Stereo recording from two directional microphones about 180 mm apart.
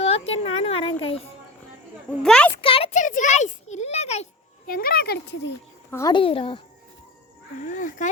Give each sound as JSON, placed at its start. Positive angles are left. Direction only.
{"t": 0.0, "sound": "a sound", "side_deg": 35}
{"t": 2.0, "sound": "speech", "side_deg": 5}
{"t": 2.6, "sound": "a child's voice", "side_deg": 30}
{"t": 4.6, "sound": "a child's voice", "side_deg": 55}
{"t": 5.9, "sound": "a woman's voice", "side_deg": 20}
{"t": 7.6, "sound": "speech", "side_deg": 45}